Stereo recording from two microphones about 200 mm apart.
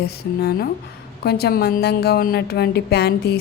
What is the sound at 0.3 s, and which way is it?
Speech, 50° left (ahead or behind).